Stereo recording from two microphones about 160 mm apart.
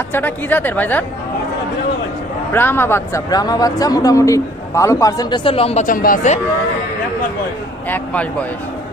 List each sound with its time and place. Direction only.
0.1 s speech: 10° left (ahead or behind)
2.5 s speech: 15° left (ahead or behind); by 5.8 s 35° left (ahead or behind)
5.8 s speech: 60° left (ahead or behind)
7.9 s speech: 10° left (ahead or behind)